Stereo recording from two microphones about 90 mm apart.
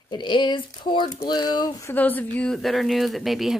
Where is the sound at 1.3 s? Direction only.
50° left (ahead or behind).